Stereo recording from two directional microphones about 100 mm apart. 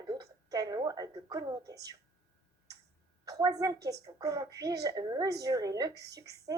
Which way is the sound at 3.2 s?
35° right (ahead or behind).